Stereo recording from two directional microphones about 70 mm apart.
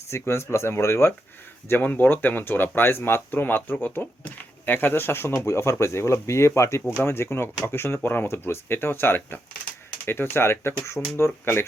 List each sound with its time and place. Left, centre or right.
0.1 s speech: left
1.7 s speech: left